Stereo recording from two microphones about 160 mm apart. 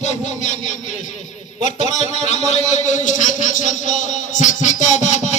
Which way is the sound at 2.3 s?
45° left (ahead or behind).